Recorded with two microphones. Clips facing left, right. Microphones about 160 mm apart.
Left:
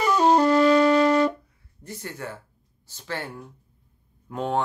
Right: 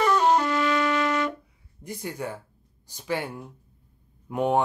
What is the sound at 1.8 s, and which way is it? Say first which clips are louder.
Speech: right 3 dB; 15° right (ahead or behind).